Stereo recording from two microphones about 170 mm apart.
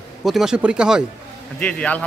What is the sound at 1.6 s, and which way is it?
Speech, 10° left (ahead or behind).